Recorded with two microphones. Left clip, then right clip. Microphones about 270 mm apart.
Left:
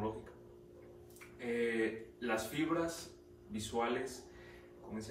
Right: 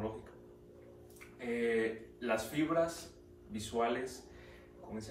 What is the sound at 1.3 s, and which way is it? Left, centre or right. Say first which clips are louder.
A man's voice: right 2 dB; centre.